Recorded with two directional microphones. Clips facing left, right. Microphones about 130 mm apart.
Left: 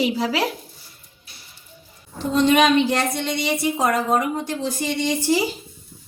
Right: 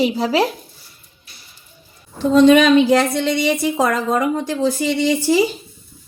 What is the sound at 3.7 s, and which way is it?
Speech, 90° right.